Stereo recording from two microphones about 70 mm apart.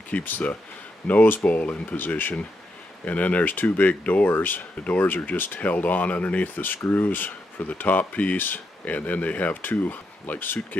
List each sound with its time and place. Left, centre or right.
0.1 s speech: left